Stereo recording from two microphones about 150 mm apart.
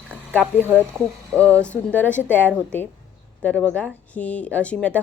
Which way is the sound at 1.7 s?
10° left (ahead or behind).